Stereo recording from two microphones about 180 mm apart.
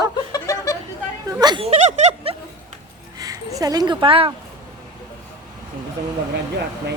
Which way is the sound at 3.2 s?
20° right (ahead or behind).